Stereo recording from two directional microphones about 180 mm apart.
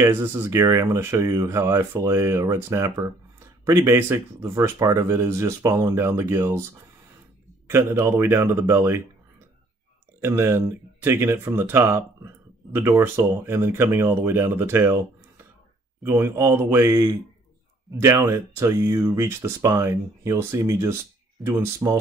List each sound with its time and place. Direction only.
0.0 s speech: 15° right (ahead or behind)
7.6 s speech: 15° right (ahead or behind)
10.2 s speech: 15° right (ahead or behind)
16.0 s speech: 15° right (ahead or behind)